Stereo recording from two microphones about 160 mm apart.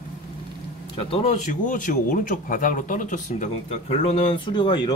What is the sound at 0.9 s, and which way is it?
Speech, 40° left (ahead or behind).